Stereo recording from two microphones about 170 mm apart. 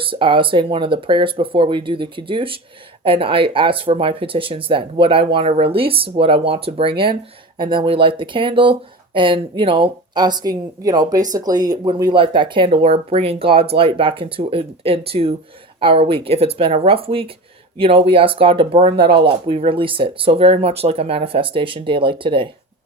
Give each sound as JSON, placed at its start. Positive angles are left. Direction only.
{"t": 0.0, "sound": "speech", "side_deg": -30}